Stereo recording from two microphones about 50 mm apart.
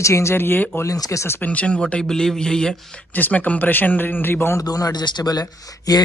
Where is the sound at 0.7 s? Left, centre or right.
Left.